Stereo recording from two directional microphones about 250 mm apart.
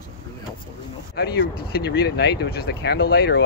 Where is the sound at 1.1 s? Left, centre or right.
Left.